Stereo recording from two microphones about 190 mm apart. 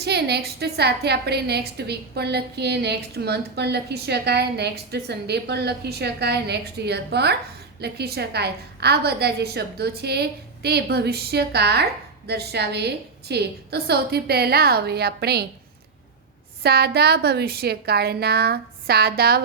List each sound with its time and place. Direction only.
0.0 s a woman's voice: 60° right (ahead or behind)
16.6 s a woman's voice: 60° right (ahead or behind)